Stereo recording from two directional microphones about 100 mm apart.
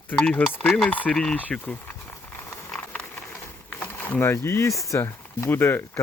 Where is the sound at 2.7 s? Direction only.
10° left (ahead or behind).